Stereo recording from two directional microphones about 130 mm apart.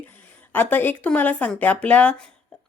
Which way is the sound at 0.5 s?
15° left (ahead or behind).